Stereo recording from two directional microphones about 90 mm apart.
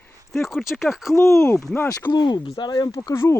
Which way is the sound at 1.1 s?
35° left (ahead or behind).